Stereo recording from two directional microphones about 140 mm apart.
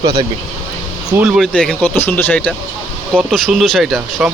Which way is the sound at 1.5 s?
10° left (ahead or behind).